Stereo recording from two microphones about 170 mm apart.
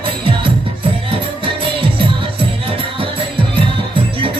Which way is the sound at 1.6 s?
30° right (ahead or behind).